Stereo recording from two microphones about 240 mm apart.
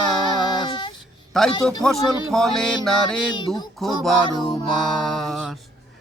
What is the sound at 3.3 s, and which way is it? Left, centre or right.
Speech, centre.